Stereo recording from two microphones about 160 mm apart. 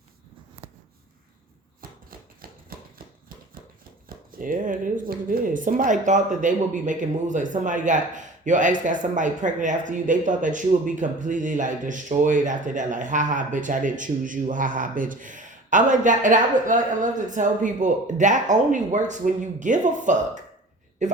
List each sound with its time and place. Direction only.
1.8 s chopping: 65° right (ahead or behind)
4.1 s speech: 60° right (ahead or behind)